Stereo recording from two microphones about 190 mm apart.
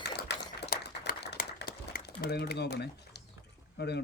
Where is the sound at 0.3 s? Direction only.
60° left (ahead or behind).